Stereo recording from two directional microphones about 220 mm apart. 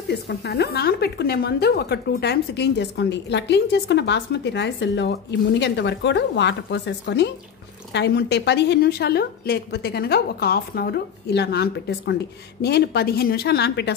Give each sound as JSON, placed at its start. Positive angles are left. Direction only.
{"t": 0.1, "sound": "a woman's voice", "side_deg": 50}